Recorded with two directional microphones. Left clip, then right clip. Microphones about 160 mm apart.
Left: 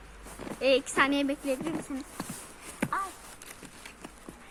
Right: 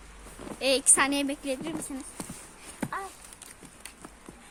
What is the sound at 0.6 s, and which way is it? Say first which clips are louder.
Speech: even; 40° right (ahead or behind).